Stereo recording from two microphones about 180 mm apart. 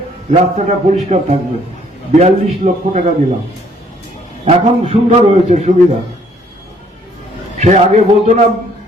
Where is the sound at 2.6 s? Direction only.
40° right (ahead or behind).